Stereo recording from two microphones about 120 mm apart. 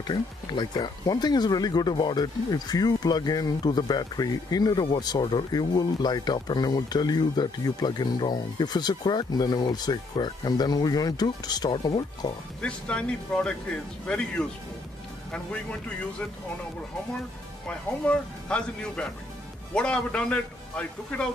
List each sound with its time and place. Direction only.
0.0 s speech: 40° left (ahead or behind)
12.6 s speech: 10° left (ahead or behind)
17.6 s speech: 10° left (ahead or behind)